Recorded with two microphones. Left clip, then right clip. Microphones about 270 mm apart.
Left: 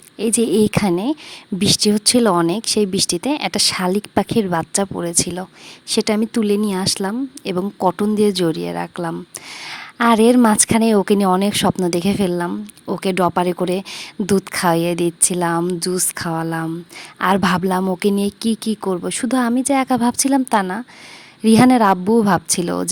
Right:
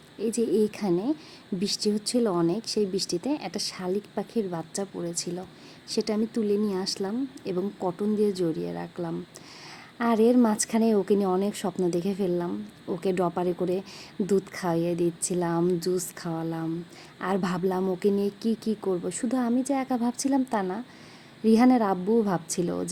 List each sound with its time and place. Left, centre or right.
0.2 s a woman's voice: left